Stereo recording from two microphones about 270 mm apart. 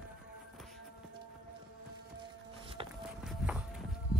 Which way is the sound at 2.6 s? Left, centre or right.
Centre.